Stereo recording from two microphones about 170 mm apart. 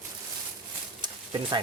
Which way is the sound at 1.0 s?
25° right (ahead or behind).